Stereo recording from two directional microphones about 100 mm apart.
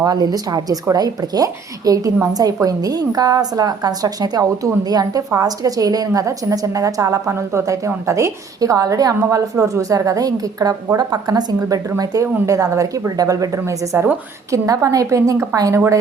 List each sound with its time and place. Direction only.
0.0 s a woman's voice: 40° right (ahead or behind)